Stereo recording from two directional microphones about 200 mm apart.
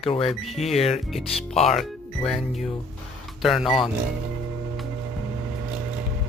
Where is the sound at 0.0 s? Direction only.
30° left (ahead or behind).